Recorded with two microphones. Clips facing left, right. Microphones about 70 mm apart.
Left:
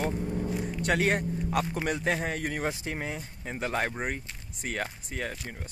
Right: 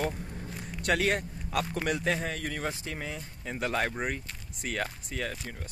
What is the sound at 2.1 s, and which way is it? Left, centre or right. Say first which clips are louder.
Speech: left 2 dB; left.